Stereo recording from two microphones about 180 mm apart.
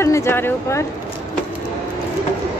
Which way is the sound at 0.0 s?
15° left (ahead or behind).